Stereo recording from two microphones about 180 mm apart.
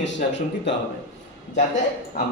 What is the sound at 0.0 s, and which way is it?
Speech, 85° left.